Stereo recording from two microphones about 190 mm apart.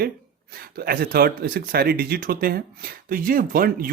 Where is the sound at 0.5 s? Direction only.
55° right (ahead or behind).